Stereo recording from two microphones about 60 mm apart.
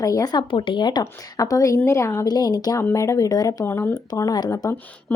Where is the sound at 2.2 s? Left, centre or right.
Left.